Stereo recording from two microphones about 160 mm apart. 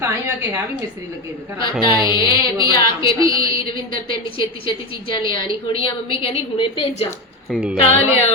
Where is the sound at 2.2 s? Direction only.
30° left (ahead or behind).